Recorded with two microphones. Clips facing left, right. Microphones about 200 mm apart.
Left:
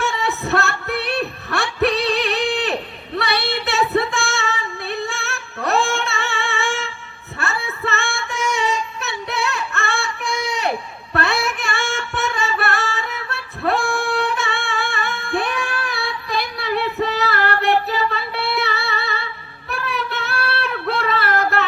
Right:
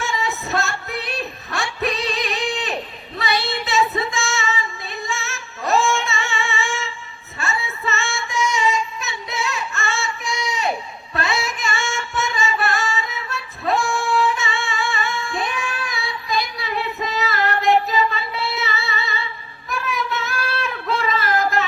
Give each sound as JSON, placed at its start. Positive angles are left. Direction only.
{"t": 0.0, "sound": "music", "side_deg": 65}
{"t": 3.2, "sound": "female singing", "side_deg": 65}
{"t": 7.3, "sound": "music", "side_deg": 60}
{"t": 19.6, "sound": "child singing", "side_deg": 60}